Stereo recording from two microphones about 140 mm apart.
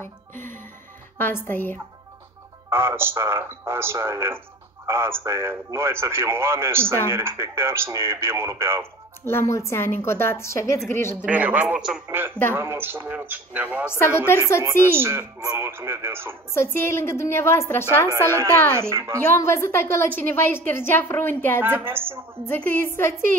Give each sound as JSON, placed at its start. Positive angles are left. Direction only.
{"t": 1.1, "sound": "a woman's voice", "side_deg": 15}
{"t": 2.7, "sound": "a man's voice", "side_deg": -15}
{"t": 9.2, "sound": "a woman's voice", "side_deg": 20}
{"t": 11.1, "sound": "a man's voice", "side_deg": -10}
{"t": 13.8, "sound": "a woman's voice", "side_deg": 15}
{"t": 14.6, "sound": "a man's voice", "side_deg": -20}
{"t": 16.5, "sound": "a woman's voice", "side_deg": 15}
{"t": 18.7, "sound": "speech", "side_deg": -20}
{"t": 19.2, "sound": "a woman's voice", "side_deg": 20}
{"t": 21.5, "sound": "a man's voice", "side_deg": -15}
{"t": 22.5, "sound": "a woman's voice", "side_deg": 15}